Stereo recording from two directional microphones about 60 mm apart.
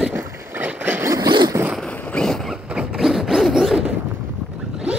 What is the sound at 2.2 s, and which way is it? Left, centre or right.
Boat, centre.